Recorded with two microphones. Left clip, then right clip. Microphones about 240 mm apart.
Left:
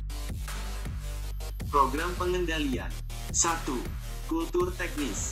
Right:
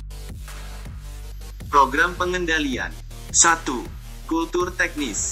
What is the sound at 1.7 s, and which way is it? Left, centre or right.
Speech, right.